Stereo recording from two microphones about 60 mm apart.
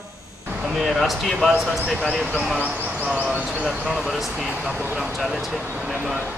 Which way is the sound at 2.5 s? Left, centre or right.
Right.